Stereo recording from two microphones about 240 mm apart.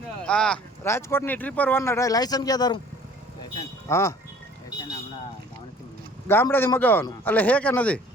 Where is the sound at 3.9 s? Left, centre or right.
Centre.